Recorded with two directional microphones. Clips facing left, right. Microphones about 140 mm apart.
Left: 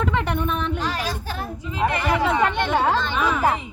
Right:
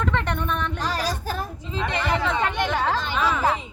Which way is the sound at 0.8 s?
40° right (ahead or behind).